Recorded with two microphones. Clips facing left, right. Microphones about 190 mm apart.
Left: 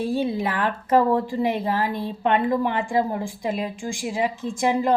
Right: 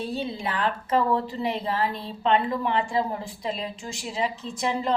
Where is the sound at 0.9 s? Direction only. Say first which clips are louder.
Left 6 dB; 50° left (ahead or behind).